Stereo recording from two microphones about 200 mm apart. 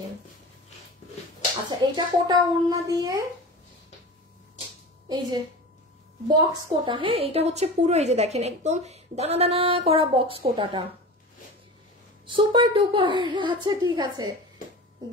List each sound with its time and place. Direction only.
2.0 s a child's voice: 20° right (ahead or behind)
5.0 s a woman's voice: 20° right (ahead or behind)
12.3 s a woman's voice: 25° right (ahead or behind)
15.0 s a sound: 20° right (ahead or behind)